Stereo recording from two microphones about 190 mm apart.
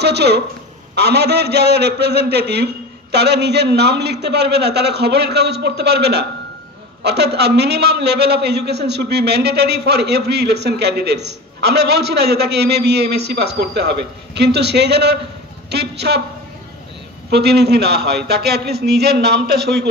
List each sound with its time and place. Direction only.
0.0 s a woman's voice: 60° right (ahead or behind)
17.3 s a man's voice: 60° right (ahead or behind)